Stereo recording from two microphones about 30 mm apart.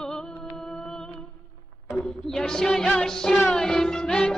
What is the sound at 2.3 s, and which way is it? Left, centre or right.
Music, centre.